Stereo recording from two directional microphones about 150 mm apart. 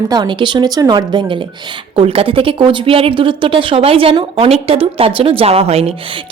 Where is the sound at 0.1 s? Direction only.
30° right (ahead or behind).